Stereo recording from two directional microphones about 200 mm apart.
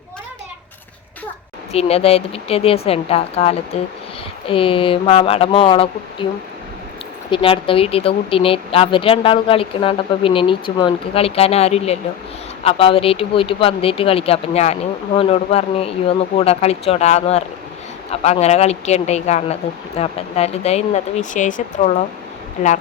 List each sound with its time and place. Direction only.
1.7 s speech: 30° left (ahead or behind)
7.3 s speech: 25° left (ahead or behind)